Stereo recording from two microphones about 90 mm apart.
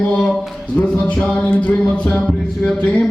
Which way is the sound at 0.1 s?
5° left (ahead or behind).